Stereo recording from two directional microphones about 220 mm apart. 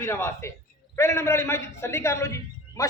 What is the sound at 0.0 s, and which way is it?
A man's voice, 10° left (ahead or behind).